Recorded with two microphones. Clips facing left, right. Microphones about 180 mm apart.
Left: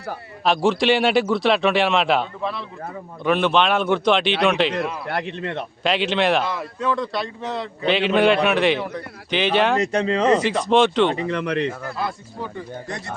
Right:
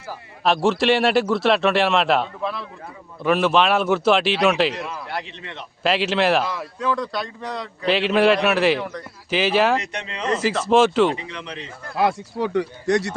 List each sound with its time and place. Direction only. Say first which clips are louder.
0.4 s a man's voice: even; centre (ahead or behind)
5.0 s speech: left 5 dB; 55° left (ahead or behind)
5.8 s a man's voice: right 1 dB; 5° right (ahead or behind)
9.8 s speech: left 12 dB; 40° left (ahead or behind)
10.7 s a man's voice: right 1 dB; 5° right (ahead or behind)
11.1 s speech: left 8 dB; 50° left (ahead or behind); by 11.9 s 65° left (ahead or behind)
11.9 s speech: right 7 dB; 80° right